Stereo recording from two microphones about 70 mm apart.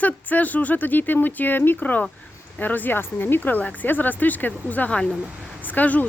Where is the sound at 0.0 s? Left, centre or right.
Left.